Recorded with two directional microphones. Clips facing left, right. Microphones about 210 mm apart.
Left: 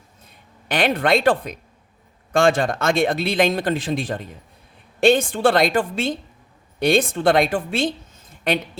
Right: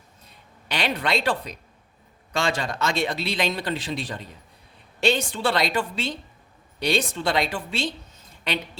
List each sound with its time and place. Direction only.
0.7 s a woman's voice: 50° left (ahead or behind)